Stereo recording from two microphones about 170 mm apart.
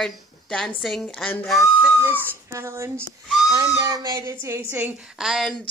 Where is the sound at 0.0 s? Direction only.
5° left (ahead or behind).